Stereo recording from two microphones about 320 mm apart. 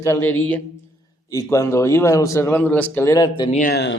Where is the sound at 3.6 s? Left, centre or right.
Left.